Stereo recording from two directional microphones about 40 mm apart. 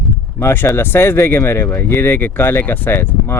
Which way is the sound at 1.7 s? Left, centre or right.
Left.